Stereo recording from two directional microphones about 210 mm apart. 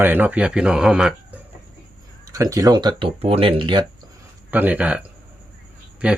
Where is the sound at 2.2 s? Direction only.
15° right (ahead or behind).